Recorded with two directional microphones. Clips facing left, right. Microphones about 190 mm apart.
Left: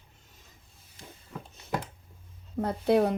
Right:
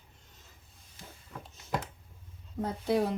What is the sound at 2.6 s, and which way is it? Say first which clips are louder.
Speech: left 5 dB; 65° left (ahead or behind).